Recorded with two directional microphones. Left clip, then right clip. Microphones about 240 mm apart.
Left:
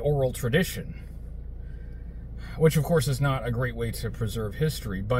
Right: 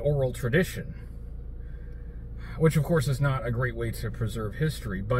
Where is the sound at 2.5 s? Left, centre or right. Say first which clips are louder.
Left 2 dB; centre.